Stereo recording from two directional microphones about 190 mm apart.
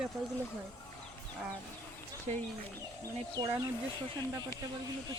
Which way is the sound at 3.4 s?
20° right (ahead or behind).